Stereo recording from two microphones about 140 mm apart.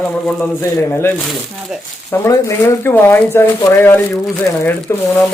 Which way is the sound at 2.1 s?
20° left (ahead or behind).